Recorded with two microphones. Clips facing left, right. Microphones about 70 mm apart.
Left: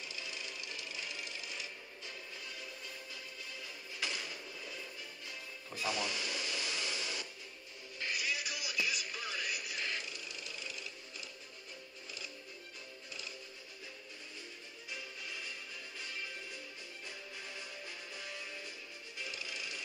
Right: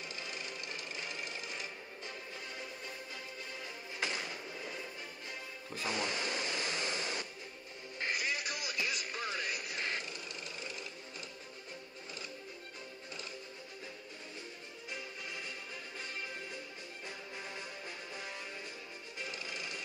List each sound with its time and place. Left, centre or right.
0.0 s sewing machine: right
4.0 s a sound: right
8.0 s music: right
17.4 s music: right